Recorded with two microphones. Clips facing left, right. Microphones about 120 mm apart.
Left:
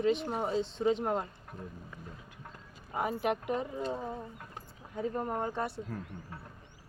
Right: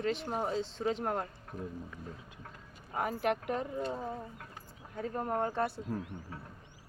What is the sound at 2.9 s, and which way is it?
Speech, 5° left (ahead or behind).